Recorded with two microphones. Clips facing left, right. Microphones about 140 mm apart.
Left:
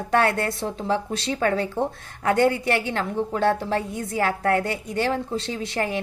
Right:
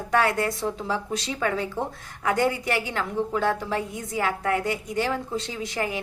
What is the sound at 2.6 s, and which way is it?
A woman's voice, 30° left (ahead or behind).